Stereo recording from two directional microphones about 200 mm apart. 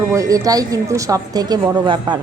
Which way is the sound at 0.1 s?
15° right (ahead or behind).